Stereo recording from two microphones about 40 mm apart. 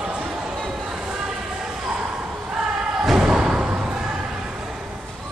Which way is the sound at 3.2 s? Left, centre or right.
Centre.